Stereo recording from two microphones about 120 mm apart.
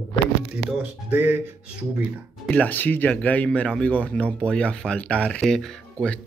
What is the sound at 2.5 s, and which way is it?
Speech, 10° left (ahead or behind).